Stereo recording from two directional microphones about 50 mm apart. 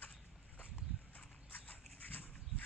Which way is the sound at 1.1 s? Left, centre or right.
Left.